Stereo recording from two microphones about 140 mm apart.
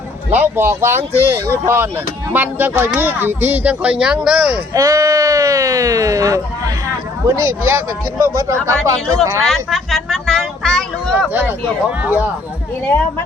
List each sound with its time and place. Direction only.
0.3 s speech: 15° right (ahead or behind)
4.7 s speech: 25° right (ahead or behind)
9.4 s speech: centre (ahead or behind)
11.3 s speech: 10° right (ahead or behind)